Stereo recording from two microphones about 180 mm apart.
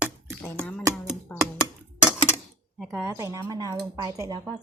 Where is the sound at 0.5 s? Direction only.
5° left (ahead or behind).